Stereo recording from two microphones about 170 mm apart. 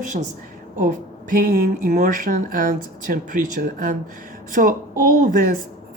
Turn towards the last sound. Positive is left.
turn(degrees=-55)  # may be behind; listen again after turning